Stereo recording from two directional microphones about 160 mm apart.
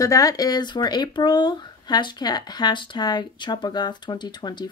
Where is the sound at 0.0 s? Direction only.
20° left (ahead or behind).